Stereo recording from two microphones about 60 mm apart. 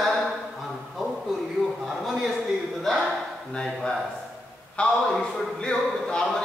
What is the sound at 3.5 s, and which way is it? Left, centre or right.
A man's voice, centre.